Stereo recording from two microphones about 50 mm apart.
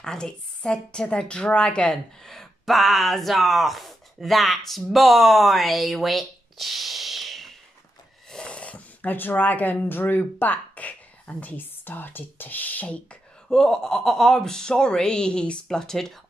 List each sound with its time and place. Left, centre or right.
0.0 s speech: centre
2.2 s speech: centre
8.3 s a sound: centre
11.4 s speech: left
13.5 s speech: centre